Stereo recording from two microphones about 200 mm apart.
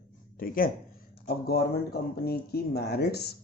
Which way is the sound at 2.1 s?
50° left (ahead or behind).